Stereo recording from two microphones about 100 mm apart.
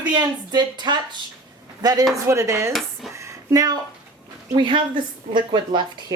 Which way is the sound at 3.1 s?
35° right (ahead or behind).